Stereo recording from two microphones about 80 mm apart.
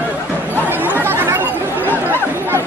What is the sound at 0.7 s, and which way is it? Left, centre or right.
Chatter, right.